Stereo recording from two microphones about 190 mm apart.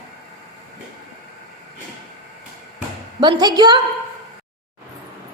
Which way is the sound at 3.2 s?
20° right (ahead or behind).